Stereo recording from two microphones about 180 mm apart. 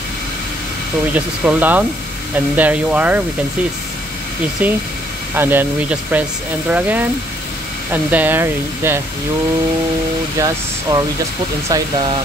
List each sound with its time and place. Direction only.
1.1 s speech: 10° right (ahead or behind)
4.6 s speech: 10° right (ahead or behind)
10.4 s speech: 20° right (ahead or behind)